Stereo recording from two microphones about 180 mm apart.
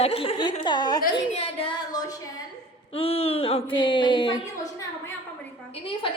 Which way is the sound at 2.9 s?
35° left (ahead or behind).